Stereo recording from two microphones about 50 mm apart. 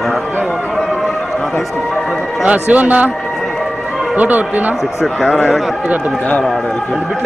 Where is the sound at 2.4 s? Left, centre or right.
Right.